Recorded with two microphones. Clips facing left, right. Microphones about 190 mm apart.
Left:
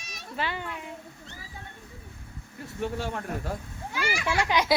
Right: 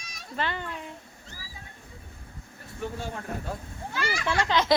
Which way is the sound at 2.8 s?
70° left (ahead or behind).